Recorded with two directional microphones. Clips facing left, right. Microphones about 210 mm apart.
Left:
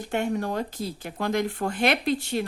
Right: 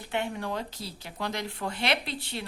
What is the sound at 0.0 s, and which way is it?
Speech, 45° left (ahead or behind).